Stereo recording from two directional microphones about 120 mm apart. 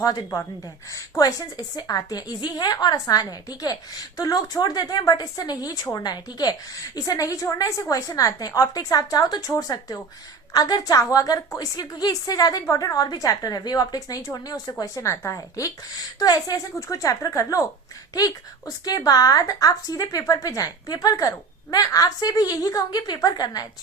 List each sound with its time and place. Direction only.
0.0 s speech: 35° left (ahead or behind)